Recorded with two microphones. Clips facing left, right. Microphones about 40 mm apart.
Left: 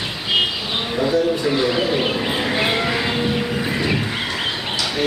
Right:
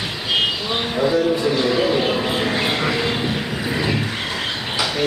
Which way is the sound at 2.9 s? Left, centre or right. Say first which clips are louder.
Even; centre.